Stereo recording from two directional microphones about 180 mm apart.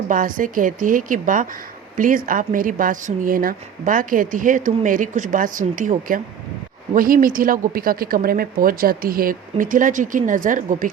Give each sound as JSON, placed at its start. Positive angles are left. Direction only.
{"t": 0.1, "sound": "speech", "side_deg": -50}